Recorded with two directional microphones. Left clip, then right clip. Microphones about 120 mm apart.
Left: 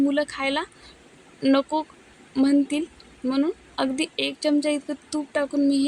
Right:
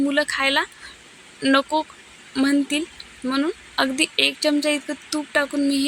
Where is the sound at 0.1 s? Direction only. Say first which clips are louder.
Right 4 dB; 15° right (ahead or behind).